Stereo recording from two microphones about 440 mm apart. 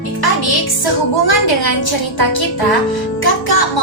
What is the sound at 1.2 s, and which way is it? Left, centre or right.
Speech, left.